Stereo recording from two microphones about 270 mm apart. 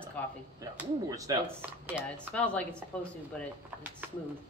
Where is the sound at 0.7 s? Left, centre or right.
Centre.